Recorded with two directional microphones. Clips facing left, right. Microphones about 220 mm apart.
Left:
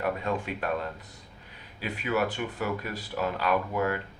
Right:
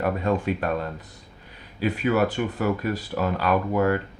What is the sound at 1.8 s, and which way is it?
Speech, 45° right (ahead or behind).